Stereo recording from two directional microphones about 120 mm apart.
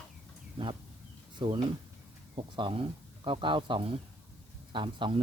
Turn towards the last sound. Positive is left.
turn(degrees=-40)  # may be behind; listen again after turning